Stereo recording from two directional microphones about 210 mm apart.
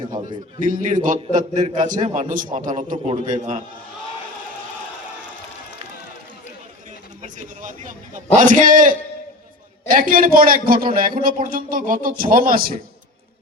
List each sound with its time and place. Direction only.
0.0 s a man's voice: 40° right (ahead or behind)
7.2 s a man's voice: 35° right (ahead or behind)